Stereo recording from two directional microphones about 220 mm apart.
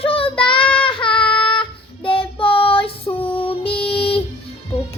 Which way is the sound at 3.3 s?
25° left (ahead or behind).